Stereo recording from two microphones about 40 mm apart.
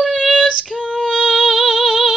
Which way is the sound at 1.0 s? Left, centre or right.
Centre.